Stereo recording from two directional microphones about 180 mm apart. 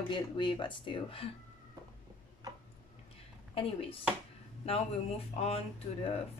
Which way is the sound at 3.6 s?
30° left (ahead or behind).